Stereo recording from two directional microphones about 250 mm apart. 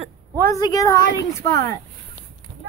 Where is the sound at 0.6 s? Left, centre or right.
Centre.